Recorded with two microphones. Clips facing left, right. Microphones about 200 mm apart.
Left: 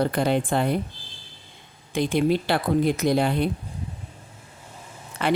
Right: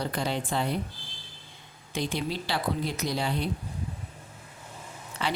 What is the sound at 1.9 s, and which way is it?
A woman's voice, 55° left (ahead or behind).